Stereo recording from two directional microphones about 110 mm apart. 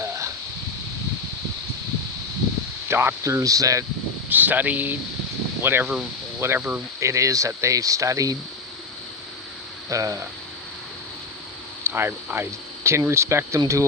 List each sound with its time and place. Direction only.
0.0 s a sound: 25° right (ahead or behind)
2.9 s speech: 20° right (ahead or behind)
4.3 s speech: 15° right (ahead or behind)
9.9 s speech: 30° right (ahead or behind)
11.8 s speech: 20° right (ahead or behind)